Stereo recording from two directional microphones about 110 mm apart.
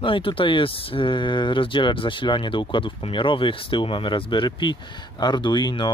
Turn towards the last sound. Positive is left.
turn(degrees=40)  # may be behind; listen again after turning